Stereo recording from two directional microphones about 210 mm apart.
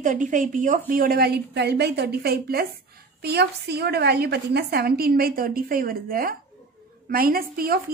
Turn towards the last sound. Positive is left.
turn(degrees=-45)  # may be behind; listen again after turning